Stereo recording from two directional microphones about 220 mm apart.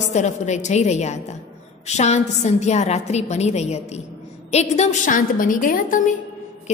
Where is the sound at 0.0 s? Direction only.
30° left (ahead or behind).